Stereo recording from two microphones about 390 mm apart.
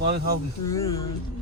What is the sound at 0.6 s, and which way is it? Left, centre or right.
Speech, centre.